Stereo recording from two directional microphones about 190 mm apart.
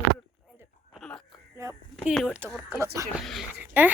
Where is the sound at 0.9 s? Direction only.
Centre (ahead or behind).